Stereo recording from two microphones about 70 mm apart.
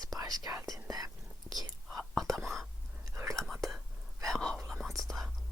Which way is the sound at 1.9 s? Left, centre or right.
Centre.